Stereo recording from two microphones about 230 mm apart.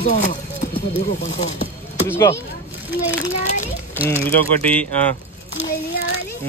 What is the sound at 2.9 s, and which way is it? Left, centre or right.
Speech, left.